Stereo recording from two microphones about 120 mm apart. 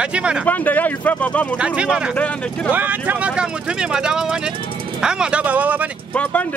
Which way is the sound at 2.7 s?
15° right (ahead or behind).